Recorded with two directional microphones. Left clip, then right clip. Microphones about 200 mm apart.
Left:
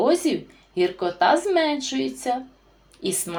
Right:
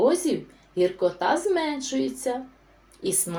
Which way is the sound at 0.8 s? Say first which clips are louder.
Left 2 dB; 30° left (ahead or behind).